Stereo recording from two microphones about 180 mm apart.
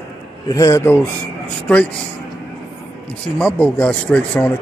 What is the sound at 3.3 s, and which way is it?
Speech, 5° left (ahead or behind).